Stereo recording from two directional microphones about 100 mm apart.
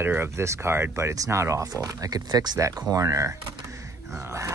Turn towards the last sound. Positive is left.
turn(degrees=-30)  # may be behind; listen again after turning